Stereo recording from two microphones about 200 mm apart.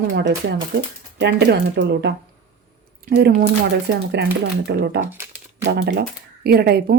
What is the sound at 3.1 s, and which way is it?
Speech, 55° right (ahead or behind).